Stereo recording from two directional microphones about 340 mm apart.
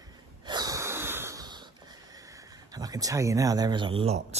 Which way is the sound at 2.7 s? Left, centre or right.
Centre.